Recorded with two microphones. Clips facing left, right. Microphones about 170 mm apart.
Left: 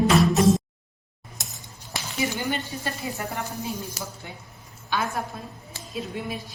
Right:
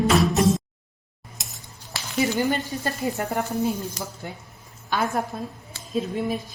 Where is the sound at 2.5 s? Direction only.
40° right (ahead or behind).